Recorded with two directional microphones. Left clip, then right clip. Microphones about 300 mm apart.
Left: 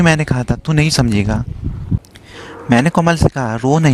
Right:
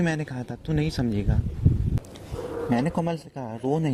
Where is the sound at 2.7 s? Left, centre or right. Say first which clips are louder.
Left 15 dB; left.